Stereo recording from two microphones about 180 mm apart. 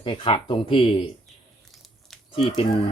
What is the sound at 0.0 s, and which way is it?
Speech, 30° left (ahead or behind).